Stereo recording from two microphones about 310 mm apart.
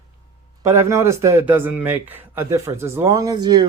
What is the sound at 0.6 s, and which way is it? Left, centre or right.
A man's voice, centre.